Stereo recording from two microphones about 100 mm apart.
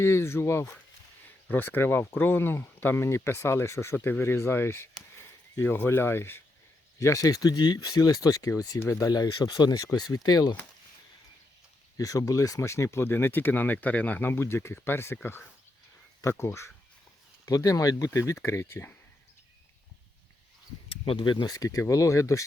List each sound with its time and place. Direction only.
0.0 s speech: 25° left (ahead or behind)
8.8 s speech: 25° left (ahead or behind)
9.0 s speech: 40° left (ahead or behind)
11.9 s speech: 35° left (ahead or behind)
21.1 s speech: 50° left (ahead or behind)
21.3 s speech: 35° left (ahead or behind)